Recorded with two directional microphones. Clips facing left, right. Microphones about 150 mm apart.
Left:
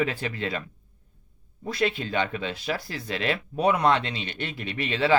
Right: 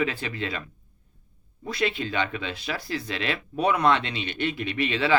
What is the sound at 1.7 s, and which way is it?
Speech, 45° left (ahead or behind).